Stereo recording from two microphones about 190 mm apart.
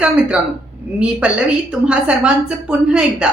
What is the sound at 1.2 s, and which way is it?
A woman's voice, 5° right (ahead or behind).